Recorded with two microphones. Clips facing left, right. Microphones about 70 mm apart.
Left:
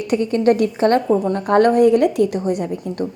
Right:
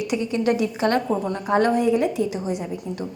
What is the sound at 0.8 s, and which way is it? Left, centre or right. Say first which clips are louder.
Speech: left 5 dB; left.